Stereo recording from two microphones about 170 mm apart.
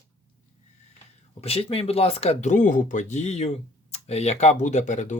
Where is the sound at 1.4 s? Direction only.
35° left (ahead or behind).